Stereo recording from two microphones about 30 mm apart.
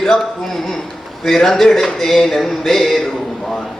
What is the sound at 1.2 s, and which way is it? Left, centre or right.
A man's voice, centre.